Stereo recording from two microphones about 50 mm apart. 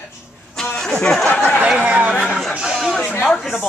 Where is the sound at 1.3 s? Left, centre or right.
Left.